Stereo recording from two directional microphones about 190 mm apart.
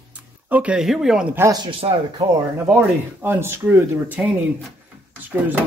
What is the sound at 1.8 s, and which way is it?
Speech, 30° right (ahead or behind).